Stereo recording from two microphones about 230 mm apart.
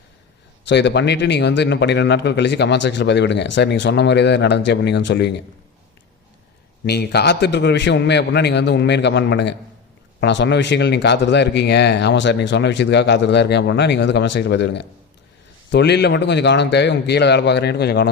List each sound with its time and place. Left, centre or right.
0.7 s speech: left
6.8 s speech: left